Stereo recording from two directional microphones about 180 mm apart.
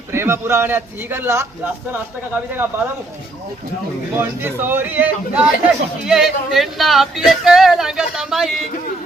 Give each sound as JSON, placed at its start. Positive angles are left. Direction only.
{"t": 0.1, "sound": "a man's voice", "side_deg": -15}
{"t": 4.1, "sound": "a man's voice", "side_deg": -10}